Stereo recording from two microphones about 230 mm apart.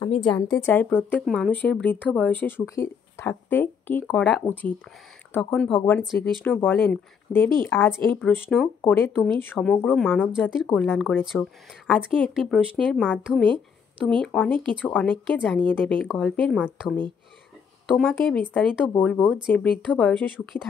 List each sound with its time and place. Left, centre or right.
0.0 s a woman's voice: left
0.3 s a woman's voice: centre